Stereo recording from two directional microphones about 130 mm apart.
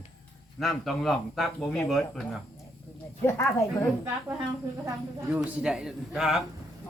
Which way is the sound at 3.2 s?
20° left (ahead or behind).